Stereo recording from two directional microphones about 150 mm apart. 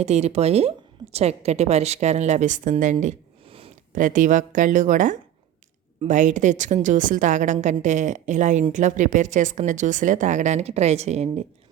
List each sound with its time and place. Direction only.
0.0 s speech: 45° right (ahead or behind)
3.9 s speech: 60° right (ahead or behind)